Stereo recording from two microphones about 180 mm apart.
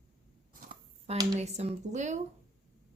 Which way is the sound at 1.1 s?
35° right (ahead or behind).